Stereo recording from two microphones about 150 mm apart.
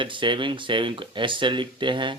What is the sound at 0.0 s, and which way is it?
Speech, 35° right (ahead or behind).